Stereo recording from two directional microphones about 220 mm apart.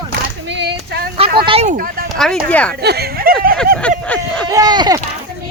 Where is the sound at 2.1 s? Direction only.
Centre (ahead or behind).